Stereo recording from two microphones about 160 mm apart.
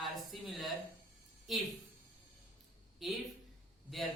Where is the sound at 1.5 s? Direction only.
Centre (ahead or behind).